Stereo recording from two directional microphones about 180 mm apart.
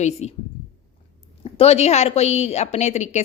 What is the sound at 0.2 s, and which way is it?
Speech, 40° left (ahead or behind).